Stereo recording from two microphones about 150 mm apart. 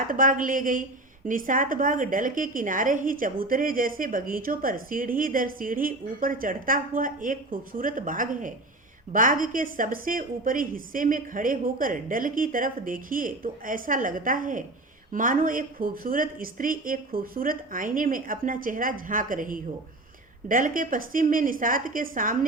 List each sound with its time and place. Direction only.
0.1 s a woman's voice: 65° right (ahead or behind)